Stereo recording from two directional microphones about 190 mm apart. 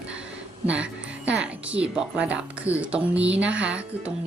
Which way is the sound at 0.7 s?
5° right (ahead or behind).